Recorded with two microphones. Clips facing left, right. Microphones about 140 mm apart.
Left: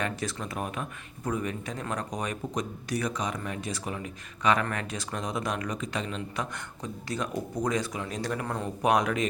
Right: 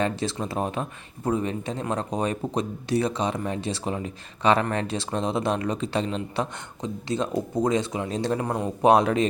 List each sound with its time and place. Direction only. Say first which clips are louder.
0.0 s speech: right 6 dB; 25° right (ahead or behind)